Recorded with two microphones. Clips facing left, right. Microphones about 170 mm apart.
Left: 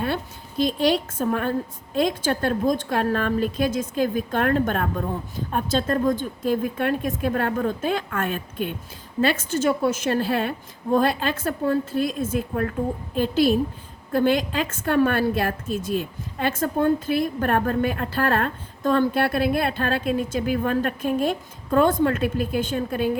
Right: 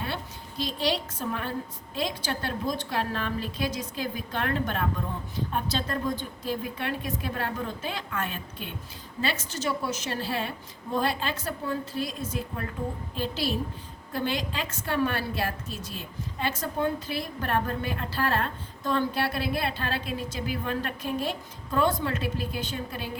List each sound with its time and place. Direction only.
0.0 s a woman's voice: 50° left (ahead or behind)